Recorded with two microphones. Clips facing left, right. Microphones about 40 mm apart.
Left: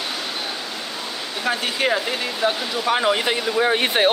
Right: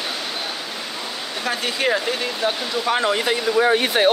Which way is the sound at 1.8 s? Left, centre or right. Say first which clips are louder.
Right 1 dB; centre.